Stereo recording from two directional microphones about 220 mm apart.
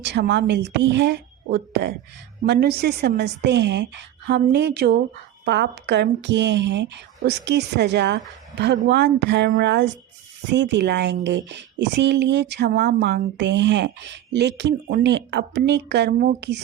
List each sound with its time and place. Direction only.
0.0 s speech: 50° right (ahead or behind)